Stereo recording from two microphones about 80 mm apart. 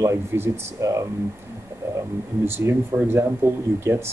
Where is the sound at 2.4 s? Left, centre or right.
Right.